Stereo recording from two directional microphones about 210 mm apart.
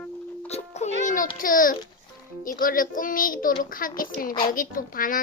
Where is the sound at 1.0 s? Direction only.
40° left (ahead or behind).